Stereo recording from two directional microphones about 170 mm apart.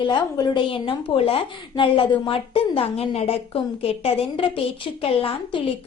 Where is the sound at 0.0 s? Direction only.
25° left (ahead or behind).